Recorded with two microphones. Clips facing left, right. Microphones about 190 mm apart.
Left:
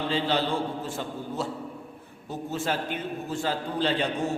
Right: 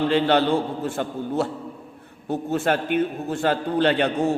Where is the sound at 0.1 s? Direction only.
65° right (ahead or behind).